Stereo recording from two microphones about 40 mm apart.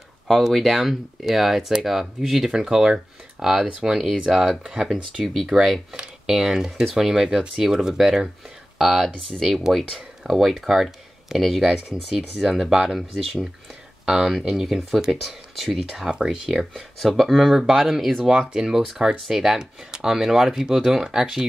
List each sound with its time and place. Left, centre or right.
0.5 s speech: centre
6.2 s speech: centre
16.1 s speech: centre
17.0 s speech: centre
18.3 s speech: centre
19.6 s speech: centre
20.2 s speech: centre